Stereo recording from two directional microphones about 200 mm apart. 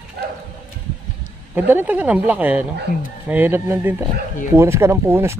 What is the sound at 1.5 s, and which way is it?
Speech, 10° right (ahead or behind).